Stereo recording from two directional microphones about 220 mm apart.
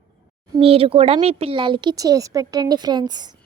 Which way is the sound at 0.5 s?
25° right (ahead or behind).